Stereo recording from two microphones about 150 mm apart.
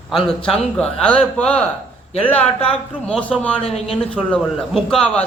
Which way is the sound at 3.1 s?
10° left (ahead or behind).